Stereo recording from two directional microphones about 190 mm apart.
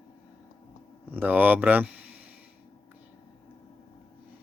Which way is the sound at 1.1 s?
10° right (ahead or behind).